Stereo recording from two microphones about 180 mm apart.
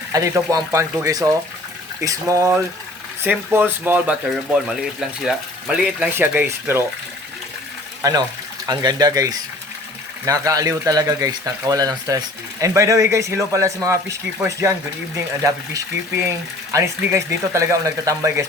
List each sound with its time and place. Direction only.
0.1 s speech: 20° right (ahead or behind)
8.0 s speech: 20° right (ahead or behind)